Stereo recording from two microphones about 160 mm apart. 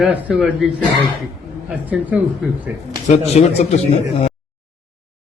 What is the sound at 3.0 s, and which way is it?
Speech, 45° left (ahead or behind).